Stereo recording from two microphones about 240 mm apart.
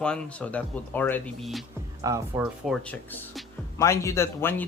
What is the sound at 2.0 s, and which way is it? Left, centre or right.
Speech, centre.